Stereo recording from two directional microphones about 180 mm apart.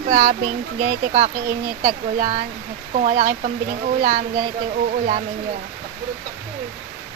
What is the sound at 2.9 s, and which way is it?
Speech, 40° right (ahead or behind).